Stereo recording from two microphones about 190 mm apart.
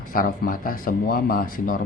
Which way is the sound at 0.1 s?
45° left (ahead or behind).